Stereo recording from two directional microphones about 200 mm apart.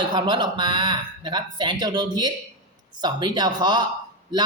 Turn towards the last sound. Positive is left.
turn(degrees=-20)  # may be behind; listen again after turning